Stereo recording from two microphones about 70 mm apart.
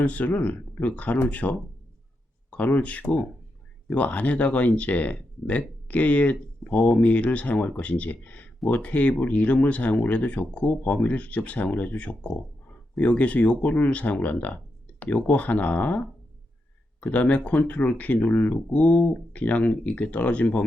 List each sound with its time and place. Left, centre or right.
0.0 s speech: centre